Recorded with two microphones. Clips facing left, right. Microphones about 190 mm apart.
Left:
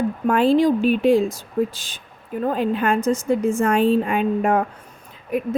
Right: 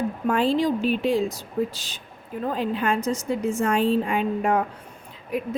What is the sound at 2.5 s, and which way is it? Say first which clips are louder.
A woman's voice: left 4 dB; 55° left (ahead or behind).